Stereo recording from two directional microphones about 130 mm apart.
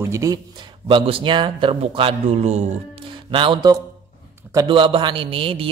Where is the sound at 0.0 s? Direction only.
25° right (ahead or behind).